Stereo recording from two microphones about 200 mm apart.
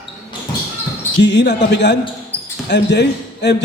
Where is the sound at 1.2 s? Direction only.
60° left (ahead or behind).